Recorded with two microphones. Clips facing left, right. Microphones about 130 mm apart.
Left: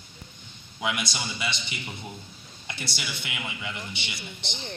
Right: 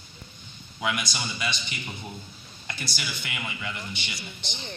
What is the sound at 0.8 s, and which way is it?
A man's voice, 20° left (ahead or behind).